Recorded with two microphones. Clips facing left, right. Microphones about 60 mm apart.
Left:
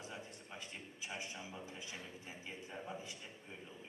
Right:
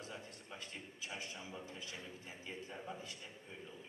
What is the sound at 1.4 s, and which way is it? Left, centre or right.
A man's voice, centre.